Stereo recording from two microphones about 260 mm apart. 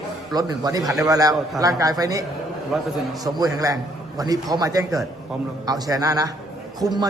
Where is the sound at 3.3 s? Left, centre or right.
Centre.